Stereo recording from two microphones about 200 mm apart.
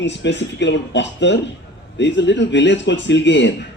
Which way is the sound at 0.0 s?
60° left (ahead or behind).